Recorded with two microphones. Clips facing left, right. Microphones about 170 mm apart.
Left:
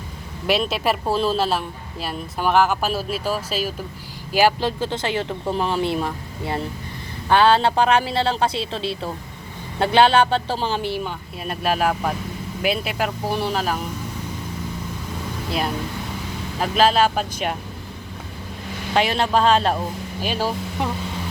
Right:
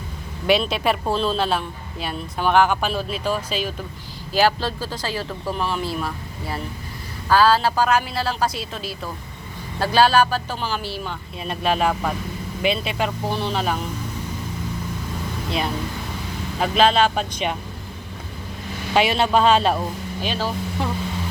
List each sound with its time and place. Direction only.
0.4 s speech: centre (ahead or behind); by 11.1 s 20° left (ahead or behind)
11.4 s speech: 5° left (ahead or behind)
15.4 s speech: 5° left (ahead or behind)
18.9 s speech: 5° right (ahead or behind)
20.2 s speech: 10° left (ahead or behind)